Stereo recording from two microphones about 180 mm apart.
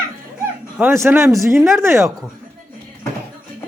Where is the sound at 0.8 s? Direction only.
15° right (ahead or behind).